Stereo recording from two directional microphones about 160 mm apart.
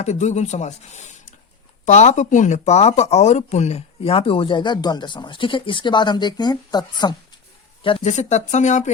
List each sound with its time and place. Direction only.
0.0 s speech: 45° left (ahead or behind); by 7.2 s 25° left (ahead or behind)
8.0 s speech: 45° left (ahead or behind)